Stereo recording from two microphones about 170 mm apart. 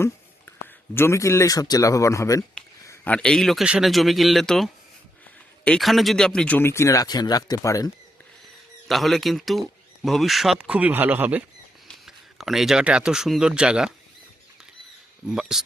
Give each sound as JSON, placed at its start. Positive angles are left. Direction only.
{"t": 0.9, "sound": "speech", "side_deg": 15}
{"t": 8.9, "sound": "speech", "side_deg": 0}
{"t": 15.4, "sound": "speech", "side_deg": 0}